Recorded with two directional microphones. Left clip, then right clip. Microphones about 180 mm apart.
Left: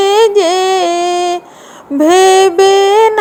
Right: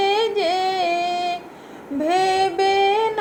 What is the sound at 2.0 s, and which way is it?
Music, 55° left (ahead or behind).